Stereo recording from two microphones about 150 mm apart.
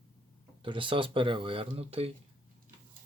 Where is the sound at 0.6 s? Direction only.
35° right (ahead or behind).